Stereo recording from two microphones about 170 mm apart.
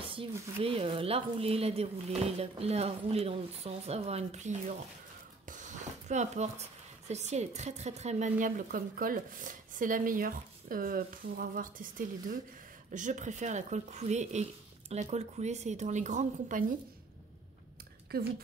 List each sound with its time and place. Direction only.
0.0 s speech: 30° right (ahead or behind)
5.5 s a sound: 45° right (ahead or behind)
7.1 s speech: 40° right (ahead or behind)
12.9 s speech: 45° right (ahead or behind)
18.1 s speech: 65° right (ahead or behind)